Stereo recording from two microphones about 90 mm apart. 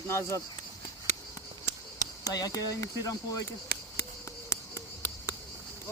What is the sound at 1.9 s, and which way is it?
Speech, 40° left (ahead or behind).